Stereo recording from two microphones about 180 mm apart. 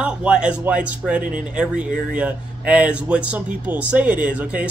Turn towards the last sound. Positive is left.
turn(degrees=-5)  # may be behind; listen again after turning